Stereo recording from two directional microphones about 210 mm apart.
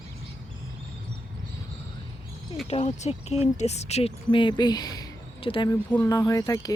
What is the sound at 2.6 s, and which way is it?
Speech, 30° left (ahead or behind).